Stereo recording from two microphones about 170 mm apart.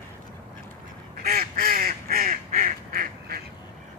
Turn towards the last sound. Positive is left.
turn(degrees=-60)  # may be behind; listen again after turning